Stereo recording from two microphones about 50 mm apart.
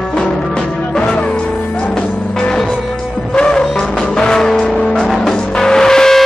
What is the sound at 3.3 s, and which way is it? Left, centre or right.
Music, centre.